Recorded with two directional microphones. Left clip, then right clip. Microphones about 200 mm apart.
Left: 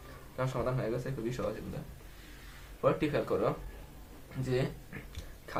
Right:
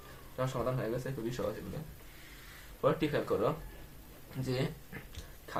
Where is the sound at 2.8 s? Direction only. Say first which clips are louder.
Left 1 dB; 20° right (ahead or behind).